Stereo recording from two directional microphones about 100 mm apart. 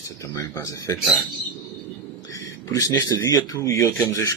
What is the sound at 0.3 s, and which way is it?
Speech, 30° left (ahead or behind).